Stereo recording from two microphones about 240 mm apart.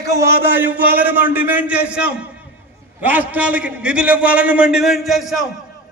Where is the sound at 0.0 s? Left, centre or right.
Centre.